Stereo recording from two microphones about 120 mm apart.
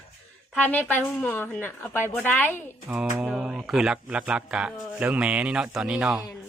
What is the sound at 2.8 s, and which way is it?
Speech, 10° right (ahead or behind).